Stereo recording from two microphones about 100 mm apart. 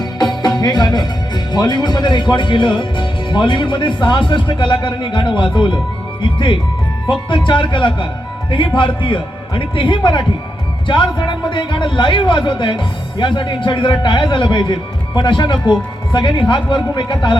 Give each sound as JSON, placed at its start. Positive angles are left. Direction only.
{"t": 0.0, "sound": "music", "side_deg": 45}
{"t": 1.5, "sound": "a man's voice", "side_deg": 45}